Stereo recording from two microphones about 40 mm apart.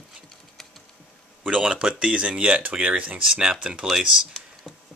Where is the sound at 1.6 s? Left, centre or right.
Right.